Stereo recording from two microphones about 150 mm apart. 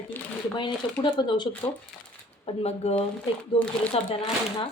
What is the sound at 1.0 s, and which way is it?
Speech, 30° left (ahead or behind).